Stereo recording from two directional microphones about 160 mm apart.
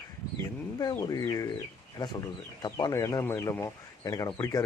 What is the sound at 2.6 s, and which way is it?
Speech, 25° left (ahead or behind).